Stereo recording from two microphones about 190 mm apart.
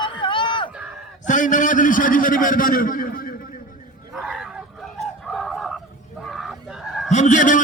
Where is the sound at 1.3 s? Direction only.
40° left (ahead or behind).